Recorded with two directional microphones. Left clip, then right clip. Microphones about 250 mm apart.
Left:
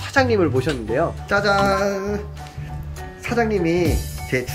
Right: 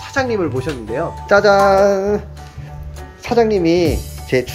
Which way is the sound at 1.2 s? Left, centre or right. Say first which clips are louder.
Right 9 dB; centre.